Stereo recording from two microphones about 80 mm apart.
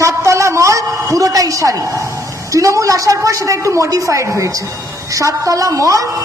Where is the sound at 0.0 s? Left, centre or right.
Right.